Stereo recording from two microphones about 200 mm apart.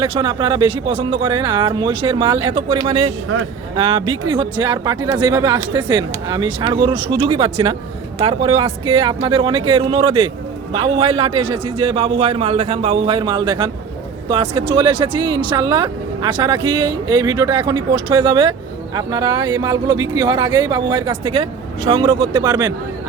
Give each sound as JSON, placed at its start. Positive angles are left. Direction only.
{"t": 0.0, "sound": "speech", "side_deg": -25}